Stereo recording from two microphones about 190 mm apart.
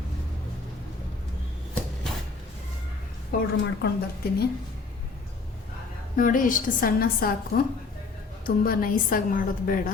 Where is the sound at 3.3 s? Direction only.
50° left (ahead or behind).